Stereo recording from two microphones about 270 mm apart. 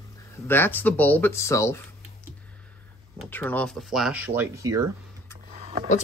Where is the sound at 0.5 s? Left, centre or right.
Centre.